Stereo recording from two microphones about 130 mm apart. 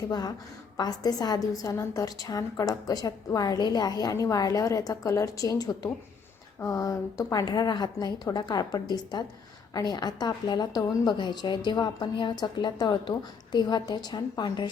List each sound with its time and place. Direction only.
0.1 s a woman's voice: 30° left (ahead or behind)